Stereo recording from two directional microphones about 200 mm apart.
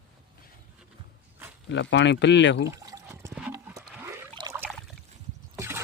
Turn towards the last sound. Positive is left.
turn(degrees=-15)  # may be behind; listen again after turning